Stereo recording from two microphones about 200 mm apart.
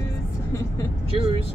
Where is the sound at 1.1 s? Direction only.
25° right (ahead or behind).